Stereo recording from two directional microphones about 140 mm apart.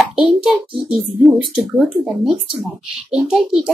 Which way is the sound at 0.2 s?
5° right (ahead or behind).